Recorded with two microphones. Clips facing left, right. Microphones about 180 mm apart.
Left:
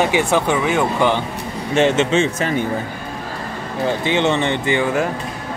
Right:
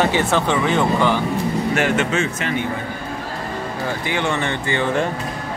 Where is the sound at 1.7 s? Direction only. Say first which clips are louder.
Left 8 dB; 25° left (ahead or behind).